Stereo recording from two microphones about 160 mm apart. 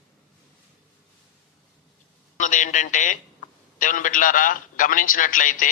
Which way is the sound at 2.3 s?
50° left (ahead or behind).